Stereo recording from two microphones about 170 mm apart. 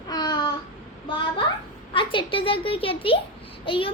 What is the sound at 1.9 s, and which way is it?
A child's voice, 30° left (ahead or behind).